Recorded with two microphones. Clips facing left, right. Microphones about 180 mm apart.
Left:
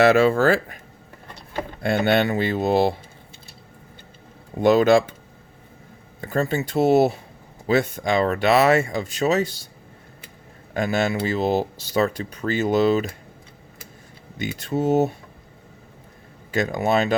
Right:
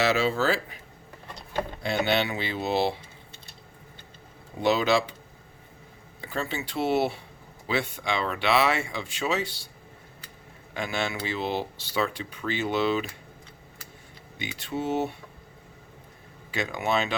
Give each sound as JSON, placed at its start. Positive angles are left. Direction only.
{"t": 0.0, "sound": "speech", "side_deg": 55}
{"t": 1.8, "sound": "speech", "side_deg": 55}
{"t": 4.6, "sound": "speech", "side_deg": 50}
{"t": 6.2, "sound": "speech", "side_deg": 45}
{"t": 10.8, "sound": "speech", "side_deg": 45}
{"t": 14.3, "sound": "speech", "side_deg": 45}
{"t": 16.5, "sound": "speech", "side_deg": 45}